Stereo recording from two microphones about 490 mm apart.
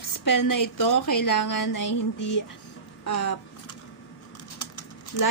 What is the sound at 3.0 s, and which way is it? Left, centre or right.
Speech, left.